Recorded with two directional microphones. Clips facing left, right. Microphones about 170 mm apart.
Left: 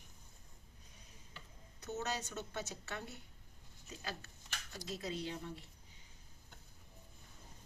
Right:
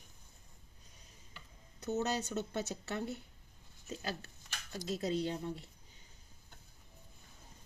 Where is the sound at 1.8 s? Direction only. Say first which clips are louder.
Right 6 dB; 35° right (ahead or behind).